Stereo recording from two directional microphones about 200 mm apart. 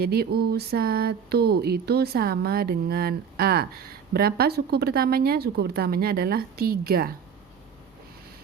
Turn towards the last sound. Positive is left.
turn(degrees=-50)  # may be behind; listen again after turning